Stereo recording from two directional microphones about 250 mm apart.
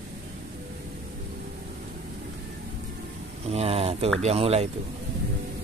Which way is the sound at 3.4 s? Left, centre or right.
Right.